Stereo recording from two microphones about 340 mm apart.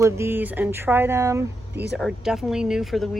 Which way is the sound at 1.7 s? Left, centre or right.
Right.